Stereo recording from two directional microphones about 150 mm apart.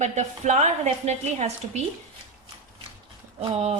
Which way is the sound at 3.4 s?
40° right (ahead or behind).